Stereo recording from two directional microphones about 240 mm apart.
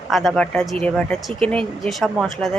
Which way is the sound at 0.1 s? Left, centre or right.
Centre.